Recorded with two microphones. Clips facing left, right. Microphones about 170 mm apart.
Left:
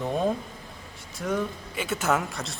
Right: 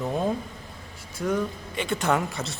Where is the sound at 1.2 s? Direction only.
Centre (ahead or behind).